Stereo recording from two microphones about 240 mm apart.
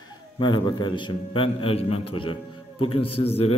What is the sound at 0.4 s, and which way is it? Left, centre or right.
A man's voice, centre.